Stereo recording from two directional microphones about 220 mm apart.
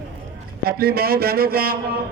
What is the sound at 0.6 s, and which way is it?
A man's voice, 45° right (ahead or behind).